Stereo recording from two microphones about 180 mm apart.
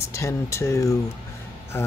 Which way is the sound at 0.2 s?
15° left (ahead or behind).